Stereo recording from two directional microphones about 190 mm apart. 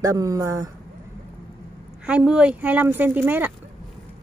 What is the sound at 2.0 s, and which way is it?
Speech, 5° right (ahead or behind).